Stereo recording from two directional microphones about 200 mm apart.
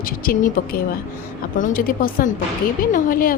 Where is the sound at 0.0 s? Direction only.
45° left (ahead or behind).